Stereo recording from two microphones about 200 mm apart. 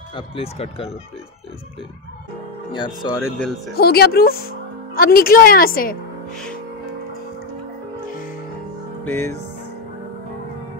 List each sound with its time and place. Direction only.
0.1 s speech: 30° left (ahead or behind)
2.7 s speech: 20° left (ahead or behind)
3.3 s speech: 5° left (ahead or behind)
3.7 s speech: 50° left (ahead or behind)
9.0 s music: 10° left (ahead or behind)